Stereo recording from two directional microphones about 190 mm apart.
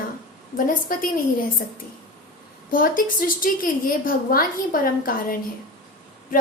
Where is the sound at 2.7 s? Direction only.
45° left (ahead or behind).